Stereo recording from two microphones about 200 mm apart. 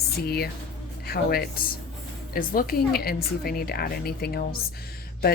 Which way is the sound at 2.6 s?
45° left (ahead or behind).